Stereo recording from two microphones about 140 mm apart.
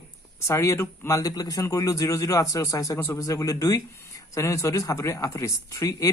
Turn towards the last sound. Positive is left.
turn(degrees=25)  # may be behind; listen again after turning